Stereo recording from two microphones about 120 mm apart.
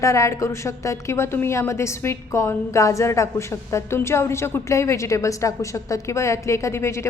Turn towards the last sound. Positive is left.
turn(degrees=25)  # may be behind; listen again after turning